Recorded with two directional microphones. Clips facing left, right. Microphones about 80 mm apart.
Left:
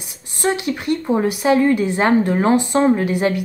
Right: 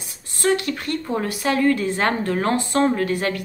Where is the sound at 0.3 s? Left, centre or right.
Centre.